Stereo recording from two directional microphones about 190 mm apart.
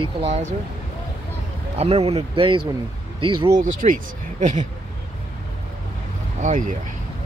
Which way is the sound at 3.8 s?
40° right (ahead or behind).